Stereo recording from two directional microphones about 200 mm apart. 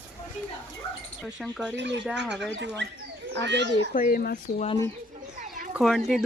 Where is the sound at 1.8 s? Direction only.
60° right (ahead or behind).